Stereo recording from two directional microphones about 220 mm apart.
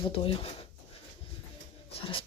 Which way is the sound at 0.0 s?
25° left (ahead or behind).